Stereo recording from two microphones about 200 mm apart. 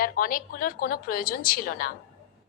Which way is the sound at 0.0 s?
45° left (ahead or behind).